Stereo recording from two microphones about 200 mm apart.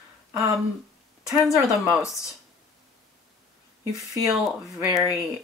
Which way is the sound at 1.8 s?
5° right (ahead or behind).